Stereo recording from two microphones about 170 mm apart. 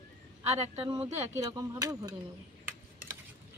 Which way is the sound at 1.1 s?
20° right (ahead or behind).